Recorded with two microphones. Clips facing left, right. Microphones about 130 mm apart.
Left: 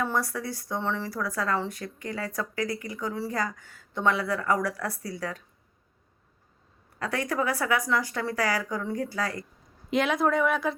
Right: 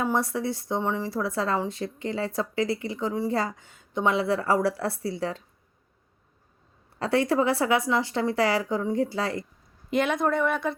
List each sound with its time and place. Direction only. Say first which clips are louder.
0.0 s speech: right 3 dB; 20° right (ahead or behind)
7.0 s speech: right 6 dB; 30° right (ahead or behind)
9.9 s speech: even; centre (ahead or behind)